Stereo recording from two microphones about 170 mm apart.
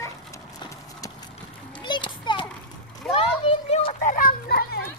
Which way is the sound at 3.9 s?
55° left (ahead or behind).